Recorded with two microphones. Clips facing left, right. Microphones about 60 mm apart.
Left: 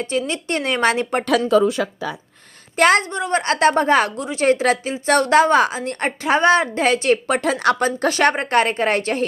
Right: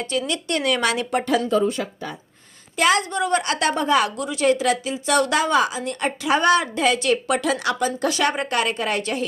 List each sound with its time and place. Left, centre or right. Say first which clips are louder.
0.0 s a woman's voice: left 2 dB; left
1.3 s speech: left 5 dB; left
2.7 s a woman's voice: left 4 dB; left
3.0 s a woman's voice: even; left